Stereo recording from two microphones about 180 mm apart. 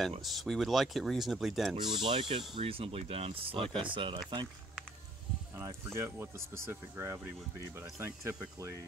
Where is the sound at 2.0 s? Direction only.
30° right (ahead or behind).